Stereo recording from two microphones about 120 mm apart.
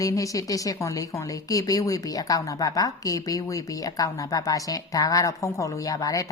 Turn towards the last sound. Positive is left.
turn(degrees=30)  # may be behind; listen again after turning